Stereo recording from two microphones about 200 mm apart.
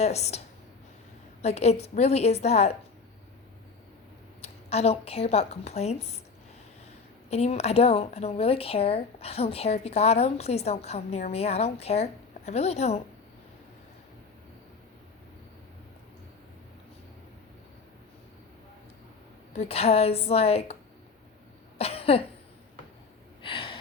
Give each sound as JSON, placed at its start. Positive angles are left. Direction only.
{"t": 0.0, "sound": "speech", "side_deg": 30}
{"t": 4.4, "sound": "a woman's voice", "side_deg": 30}
{"t": 7.3, "sound": "speech", "side_deg": 30}
{"t": 19.5, "sound": "speech", "side_deg": 30}
{"t": 21.8, "sound": "cough", "side_deg": 30}
{"t": 23.4, "sound": "gasp", "side_deg": 25}